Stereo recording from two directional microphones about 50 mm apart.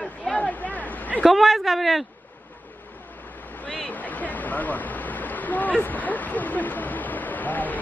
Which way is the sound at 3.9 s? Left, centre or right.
Left.